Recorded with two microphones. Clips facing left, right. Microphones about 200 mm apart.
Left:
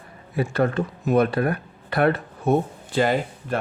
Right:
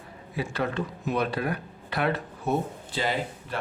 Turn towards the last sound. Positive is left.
turn(degrees=50)  # may be behind; listen again after turning